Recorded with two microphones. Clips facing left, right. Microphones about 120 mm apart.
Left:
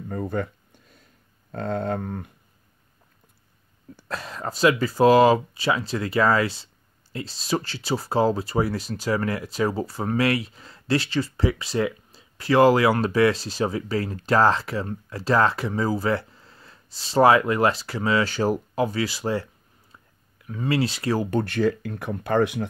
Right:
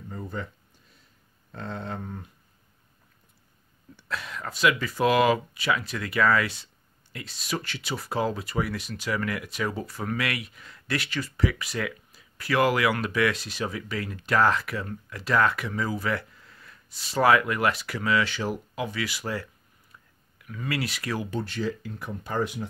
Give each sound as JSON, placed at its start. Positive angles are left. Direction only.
{"t": 0.1, "sound": "speech", "side_deg": 55}
{"t": 1.5, "sound": "speech", "side_deg": 50}
{"t": 3.9, "sound": "speech", "side_deg": 40}
{"t": 21.3, "sound": "speech", "side_deg": 60}